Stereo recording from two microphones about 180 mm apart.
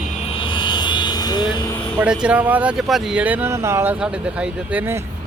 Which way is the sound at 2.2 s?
10° right (ahead or behind).